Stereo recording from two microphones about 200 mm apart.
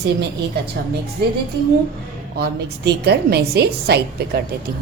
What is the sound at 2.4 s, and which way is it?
A woman's voice, 55° right (ahead or behind).